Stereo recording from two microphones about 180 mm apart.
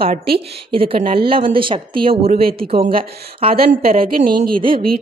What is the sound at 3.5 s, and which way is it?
Speech, 55° right (ahead or behind).